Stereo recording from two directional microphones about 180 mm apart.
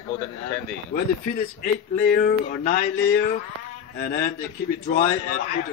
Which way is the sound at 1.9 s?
45° left (ahead or behind).